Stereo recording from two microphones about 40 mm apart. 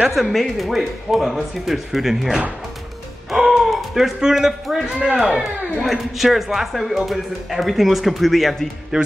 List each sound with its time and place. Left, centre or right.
0.1 s speech: centre
3.3 s gasp: centre
4.2 s a man's voice: centre
4.8 s speech: right
5.9 s speech: centre
8.9 s a man's voice: centre